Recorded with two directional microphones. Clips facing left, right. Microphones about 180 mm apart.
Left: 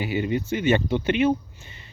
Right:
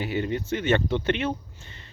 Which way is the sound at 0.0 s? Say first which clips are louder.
Left 2 dB; 5° left (ahead or behind).